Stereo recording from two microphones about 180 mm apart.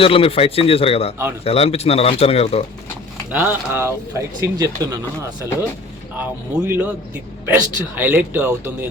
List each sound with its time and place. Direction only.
0.0 s speech: 30° left (ahead or behind)
3.3 s speech: 10° right (ahead or behind)
6.1 s speech: 10° right (ahead or behind)